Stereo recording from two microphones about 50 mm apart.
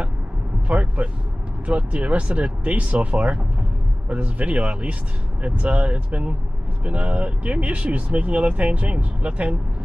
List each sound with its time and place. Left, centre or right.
0.7 s speech: right